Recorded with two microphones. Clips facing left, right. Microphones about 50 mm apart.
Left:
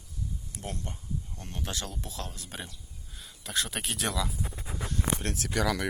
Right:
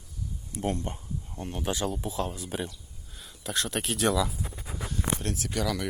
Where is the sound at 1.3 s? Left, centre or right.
Centre.